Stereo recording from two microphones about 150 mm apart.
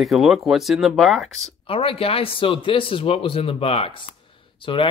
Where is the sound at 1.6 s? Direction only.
40° left (ahead or behind).